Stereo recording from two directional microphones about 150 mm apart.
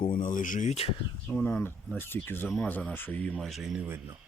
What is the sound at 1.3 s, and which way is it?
Speech, 5° left (ahead or behind).